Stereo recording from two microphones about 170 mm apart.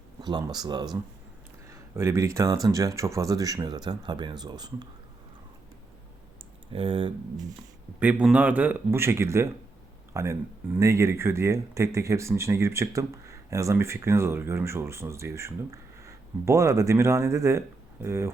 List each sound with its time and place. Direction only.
0.2 s speech: 25° right (ahead or behind)
6.7 s speech: 30° right (ahead or behind)
7.9 s speech: 5° right (ahead or behind)